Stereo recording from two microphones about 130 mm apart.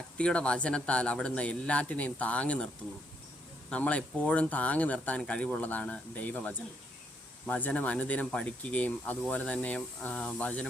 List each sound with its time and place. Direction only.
0.2 s speech: 10° left (ahead or behind)
3.7 s speech: 10° left (ahead or behind)